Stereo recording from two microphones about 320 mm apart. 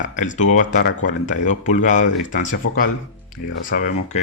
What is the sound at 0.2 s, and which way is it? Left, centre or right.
Speech, left.